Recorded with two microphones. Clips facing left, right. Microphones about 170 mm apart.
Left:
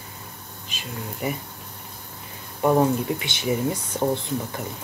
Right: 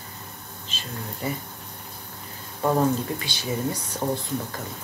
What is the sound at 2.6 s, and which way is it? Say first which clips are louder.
Speech: left 3 dB; 15° left (ahead or behind).